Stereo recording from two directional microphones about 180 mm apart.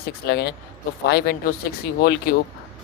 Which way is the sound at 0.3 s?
65° left (ahead or behind).